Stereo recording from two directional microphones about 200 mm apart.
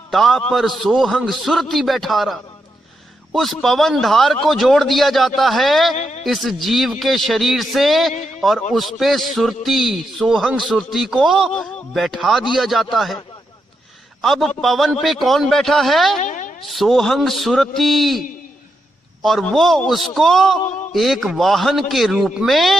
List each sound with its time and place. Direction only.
0.1 s a man's voice: centre (ahead or behind)
5.9 s speech: 35° left (ahead or behind)
6.2 s a man's voice: centre (ahead or behind)
14.2 s a man's voice: centre (ahead or behind)
16.1 s boing: 40° left (ahead or behind)
16.6 s a man's voice: centre (ahead or behind)
19.2 s a man's voice: centre (ahead or behind)